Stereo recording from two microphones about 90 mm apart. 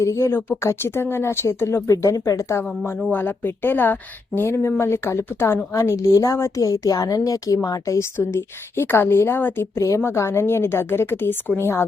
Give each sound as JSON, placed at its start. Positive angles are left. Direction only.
{"t": 0.0, "sound": "speech", "side_deg": 35}
{"t": 3.1, "sound": "a woman's voice", "side_deg": 20}